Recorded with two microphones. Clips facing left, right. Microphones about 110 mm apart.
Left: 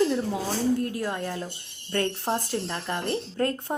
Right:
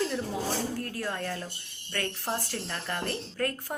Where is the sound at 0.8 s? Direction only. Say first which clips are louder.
Left 5 dB; 20° left (ahead or behind).